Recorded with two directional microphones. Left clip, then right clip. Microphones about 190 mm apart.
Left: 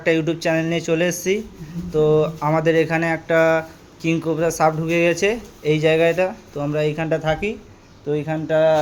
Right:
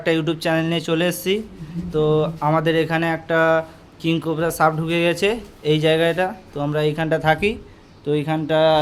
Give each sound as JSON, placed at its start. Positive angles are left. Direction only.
{"t": 0.0, "sound": "speech", "side_deg": -5}
{"t": 7.3, "sound": "speech", "side_deg": -25}